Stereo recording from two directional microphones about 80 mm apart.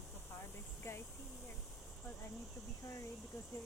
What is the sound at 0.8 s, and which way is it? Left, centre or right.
Speech, left.